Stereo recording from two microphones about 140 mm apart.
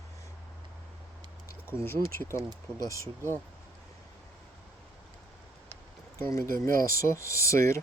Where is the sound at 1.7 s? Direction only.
20° left (ahead or behind).